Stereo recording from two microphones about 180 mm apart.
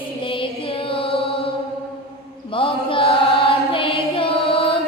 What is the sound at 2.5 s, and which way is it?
Chant, 30° left (ahead or behind).